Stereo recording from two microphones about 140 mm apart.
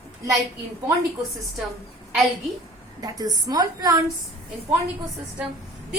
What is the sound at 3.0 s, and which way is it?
Speech, 25° right (ahead or behind).